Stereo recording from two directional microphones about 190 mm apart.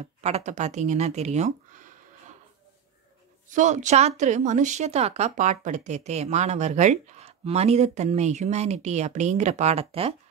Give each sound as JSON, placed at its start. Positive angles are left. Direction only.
{"t": 0.0, "sound": "speech", "side_deg": -35}
{"t": 3.4, "sound": "a woman's voice", "side_deg": -40}